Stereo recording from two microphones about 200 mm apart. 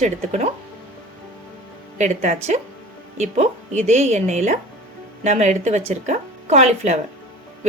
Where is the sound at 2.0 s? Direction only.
35° right (ahead or behind).